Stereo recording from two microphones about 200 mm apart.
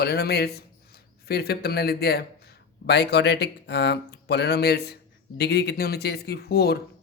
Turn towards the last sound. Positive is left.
turn(degrees=50)  # may be behind; listen again after turning